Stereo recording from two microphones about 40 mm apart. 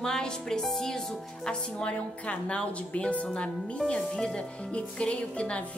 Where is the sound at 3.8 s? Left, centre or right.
Centre.